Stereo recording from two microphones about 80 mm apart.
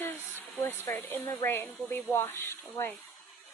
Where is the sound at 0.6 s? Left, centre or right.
Left.